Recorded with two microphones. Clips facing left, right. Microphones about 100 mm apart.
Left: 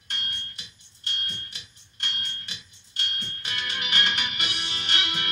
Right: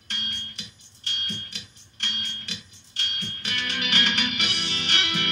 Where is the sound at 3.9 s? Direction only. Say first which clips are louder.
Right 1 dB; 65° right (ahead or behind).